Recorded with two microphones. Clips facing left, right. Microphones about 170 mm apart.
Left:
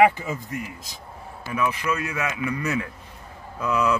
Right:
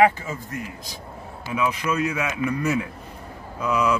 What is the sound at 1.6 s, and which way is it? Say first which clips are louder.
Speech: right 2 dB; 15° right (ahead or behind).